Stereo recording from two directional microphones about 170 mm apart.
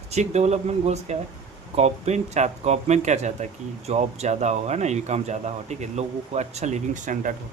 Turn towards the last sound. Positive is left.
turn(degrees=-50)  # may be behind; listen again after turning